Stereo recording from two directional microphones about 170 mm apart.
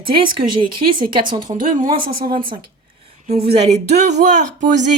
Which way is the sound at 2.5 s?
35° right (ahead or behind).